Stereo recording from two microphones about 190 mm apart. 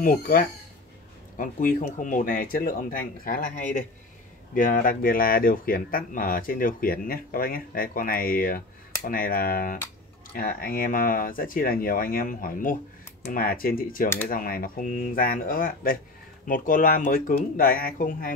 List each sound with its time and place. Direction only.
0.0 s speech: 45° left (ahead or behind)
14.0 s speech: 10° left (ahead or behind)
14.3 s speech: 50° left (ahead or behind)